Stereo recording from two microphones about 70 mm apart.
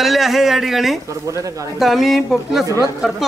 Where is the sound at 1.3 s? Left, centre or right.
Right.